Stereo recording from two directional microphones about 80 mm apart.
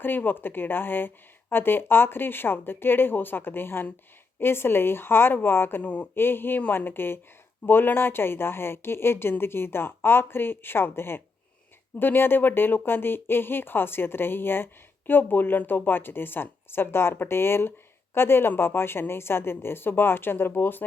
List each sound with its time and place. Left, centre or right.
0.0 s speech: left
5.8 s a sound: centre
6.1 s speech: left